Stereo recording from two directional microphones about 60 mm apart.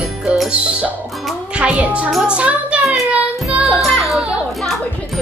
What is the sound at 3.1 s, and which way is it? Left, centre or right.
Child singing, right.